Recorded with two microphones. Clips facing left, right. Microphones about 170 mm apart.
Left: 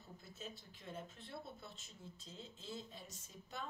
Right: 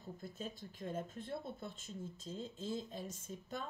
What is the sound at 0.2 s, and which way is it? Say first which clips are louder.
Speech: right 5 dB; 50° right (ahead or behind).